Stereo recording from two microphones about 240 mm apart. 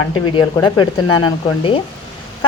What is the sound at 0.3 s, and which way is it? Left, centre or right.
Speech, centre.